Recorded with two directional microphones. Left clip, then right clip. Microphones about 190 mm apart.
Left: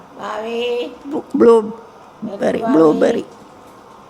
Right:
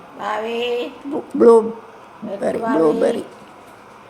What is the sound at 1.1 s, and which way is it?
Speech, 20° left (ahead or behind).